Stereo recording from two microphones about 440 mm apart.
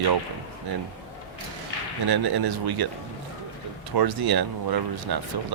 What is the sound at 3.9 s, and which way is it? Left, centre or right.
Speech, right.